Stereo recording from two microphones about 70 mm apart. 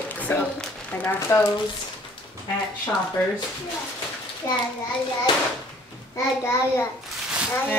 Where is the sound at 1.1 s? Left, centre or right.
Left.